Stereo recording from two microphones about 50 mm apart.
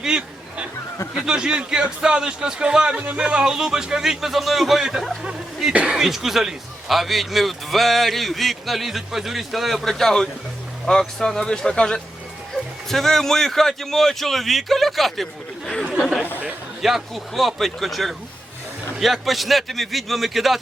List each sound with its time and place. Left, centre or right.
0.0 s hubbub: centre
1.2 s a man's voice: centre